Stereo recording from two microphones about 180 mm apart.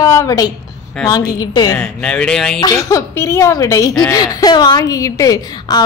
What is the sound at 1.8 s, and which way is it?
Speech, 5° left (ahead or behind).